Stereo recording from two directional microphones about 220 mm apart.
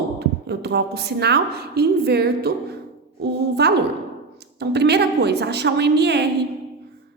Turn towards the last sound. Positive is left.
turn(degrees=-50)  # may be behind; listen again after turning